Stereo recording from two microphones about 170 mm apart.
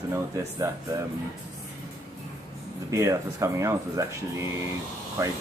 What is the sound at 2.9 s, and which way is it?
Speech, 15° right (ahead or behind).